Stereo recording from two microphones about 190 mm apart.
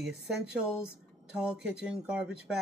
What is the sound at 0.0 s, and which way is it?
Speech, 5° right (ahead or behind).